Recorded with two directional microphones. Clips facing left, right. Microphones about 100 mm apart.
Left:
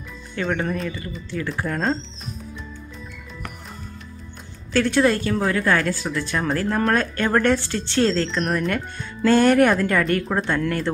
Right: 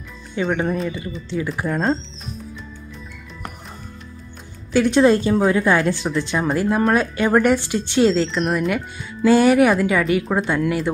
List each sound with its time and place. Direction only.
0.4 s speech: 15° right (ahead or behind)
4.7 s speech: 20° right (ahead or behind)